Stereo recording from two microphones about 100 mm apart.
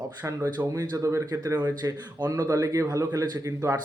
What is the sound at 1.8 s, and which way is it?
Speech, 40° right (ahead or behind).